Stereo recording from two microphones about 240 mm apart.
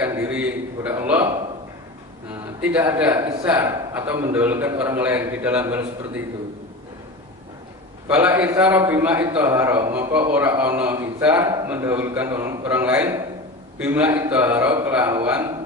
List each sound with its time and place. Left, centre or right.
0.0 s a sound: centre
2.4 s a man's voice: centre
8.1 s a man's voice: centre